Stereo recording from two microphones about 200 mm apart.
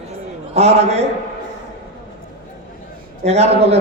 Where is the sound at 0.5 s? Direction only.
30° right (ahead or behind).